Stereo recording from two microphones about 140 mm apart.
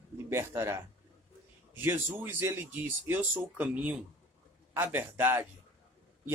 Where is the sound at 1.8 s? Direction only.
15° right (ahead or behind).